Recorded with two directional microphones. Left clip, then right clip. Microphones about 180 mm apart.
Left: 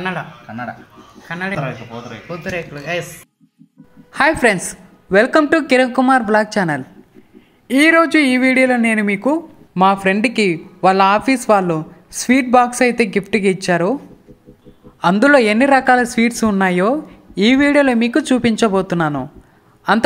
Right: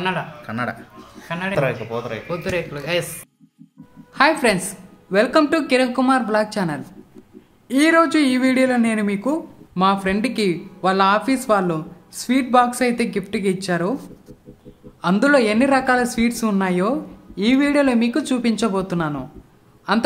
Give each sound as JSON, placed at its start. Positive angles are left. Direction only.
{"t": 0.5, "sound": "speech", "side_deg": -60}
{"t": 2.2, "sound": "a man's voice", "side_deg": 10}
{"t": 4.1, "sound": "speech", "side_deg": 30}
{"t": 15.0, "sound": "speech", "side_deg": 30}